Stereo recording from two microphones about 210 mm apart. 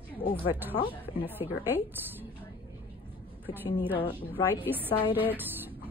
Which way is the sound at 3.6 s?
10° right (ahead or behind).